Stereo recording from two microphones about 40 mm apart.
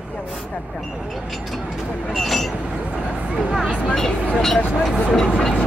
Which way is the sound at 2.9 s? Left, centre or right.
Centre.